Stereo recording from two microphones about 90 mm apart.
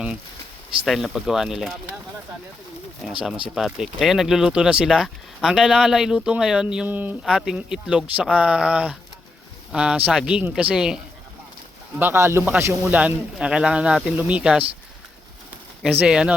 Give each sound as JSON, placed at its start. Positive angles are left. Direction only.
{"t": 0.9, "sound": "speech", "side_deg": -5}
{"t": 3.1, "sound": "speech", "side_deg": -10}
{"t": 6.8, "sound": "speech", "side_deg": -20}
{"t": 7.3, "sound": "speech", "side_deg": -5}
{"t": 11.9, "sound": "speech", "side_deg": -25}
{"t": 12.8, "sound": "speech", "side_deg": -15}
{"t": 15.8, "sound": "speech", "side_deg": -10}